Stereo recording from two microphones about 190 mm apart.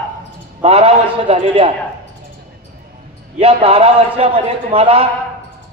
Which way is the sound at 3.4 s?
30° right (ahead or behind).